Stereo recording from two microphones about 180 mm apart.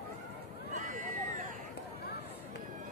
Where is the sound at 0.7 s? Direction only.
45° right (ahead or behind).